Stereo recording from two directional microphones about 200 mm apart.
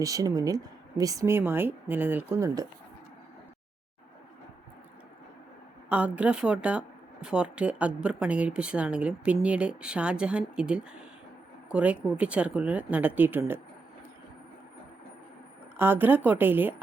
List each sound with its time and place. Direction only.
0.0 s speech: 15° right (ahead or behind)
5.9 s speech: 5° right (ahead or behind)
15.8 s speech: 10° right (ahead or behind)